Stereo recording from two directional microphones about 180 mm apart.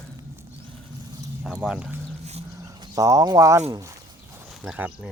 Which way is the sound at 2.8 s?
20° right (ahead or behind).